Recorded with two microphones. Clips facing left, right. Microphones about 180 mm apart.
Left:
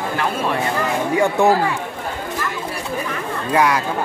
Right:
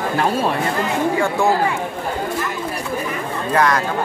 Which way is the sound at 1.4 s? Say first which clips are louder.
Left 3 dB; 20° left (ahead or behind).